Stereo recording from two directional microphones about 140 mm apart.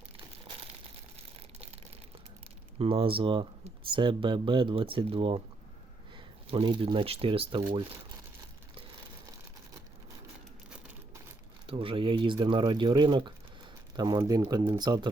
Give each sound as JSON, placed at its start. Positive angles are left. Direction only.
{"t": 2.7, "sound": "speech", "side_deg": -40}
{"t": 11.6, "sound": "speech", "side_deg": -40}